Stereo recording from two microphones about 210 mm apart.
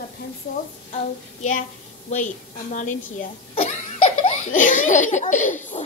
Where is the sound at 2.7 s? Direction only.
35° left (ahead or behind).